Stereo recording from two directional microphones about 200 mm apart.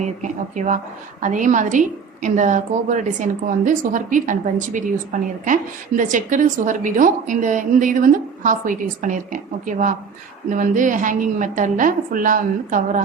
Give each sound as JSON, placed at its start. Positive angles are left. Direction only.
{"t": 0.0, "sound": "a woman's voice", "side_deg": -40}